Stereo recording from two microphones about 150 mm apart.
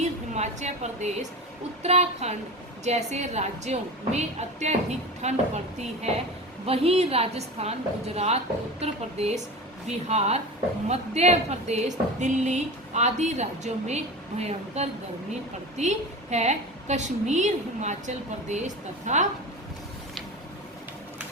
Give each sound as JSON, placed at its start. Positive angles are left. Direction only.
{"t": 0.0, "sound": "a woman's voice", "side_deg": -50}
{"t": 6.7, "sound": "a woman's voice", "side_deg": -40}